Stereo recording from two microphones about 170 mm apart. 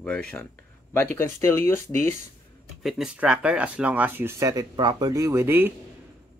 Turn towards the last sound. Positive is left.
turn(degrees=-15)  # may be behind; listen again after turning